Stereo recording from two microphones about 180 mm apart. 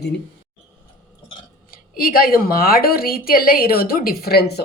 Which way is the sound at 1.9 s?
55° left (ahead or behind).